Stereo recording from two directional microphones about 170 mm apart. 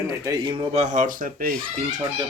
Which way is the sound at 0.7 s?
45° right (ahead or behind).